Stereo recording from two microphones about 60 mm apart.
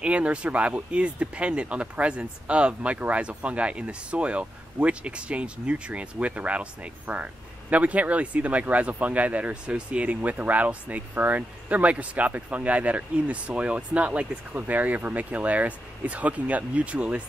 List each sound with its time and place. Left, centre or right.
0.0 s speech: centre